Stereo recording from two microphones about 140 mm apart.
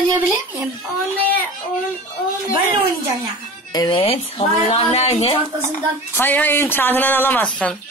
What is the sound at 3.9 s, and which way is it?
Speech, 40° left (ahead or behind).